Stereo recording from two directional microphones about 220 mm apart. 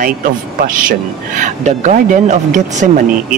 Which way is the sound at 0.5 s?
40° right (ahead or behind).